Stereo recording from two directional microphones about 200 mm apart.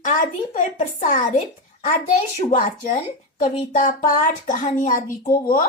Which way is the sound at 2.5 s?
40° left (ahead or behind).